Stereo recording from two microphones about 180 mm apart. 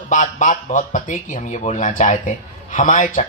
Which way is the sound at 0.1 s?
45° left (ahead or behind).